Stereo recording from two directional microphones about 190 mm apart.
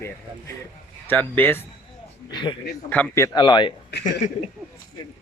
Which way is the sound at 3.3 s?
25° left (ahead or behind).